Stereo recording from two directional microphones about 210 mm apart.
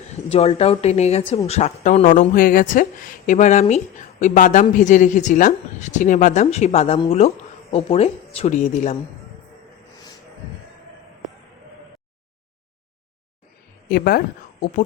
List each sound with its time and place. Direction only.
0.1 s a woman's voice: 30° left (ahead or behind)
13.9 s a woman's voice: 45° left (ahead or behind)